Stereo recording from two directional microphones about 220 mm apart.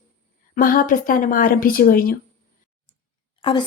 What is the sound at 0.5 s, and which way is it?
A woman's voice, 40° left (ahead or behind).